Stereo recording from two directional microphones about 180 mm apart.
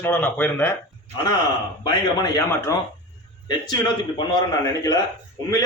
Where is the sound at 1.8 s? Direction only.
20° left (ahead or behind).